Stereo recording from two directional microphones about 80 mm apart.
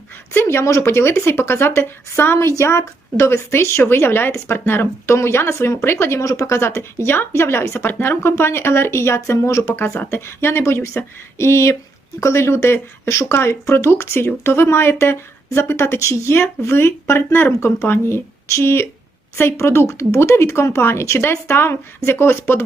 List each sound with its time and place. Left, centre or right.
0.3 s speech: left